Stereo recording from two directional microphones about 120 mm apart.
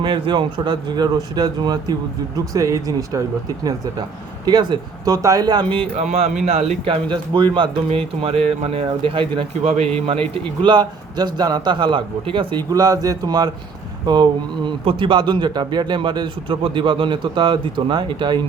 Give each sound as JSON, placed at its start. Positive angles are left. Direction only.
{"t": 0.0, "sound": "speech", "side_deg": -40}
{"t": 6.0, "sound": "speech", "side_deg": -70}
{"t": 6.8, "sound": "speech", "side_deg": -40}
{"t": 7.9, "sound": "speech", "side_deg": -55}
{"t": 9.7, "sound": "speech", "side_deg": -60}
{"t": 10.7, "sound": "speech", "side_deg": -40}
{"t": 12.7, "sound": "speech", "side_deg": -30}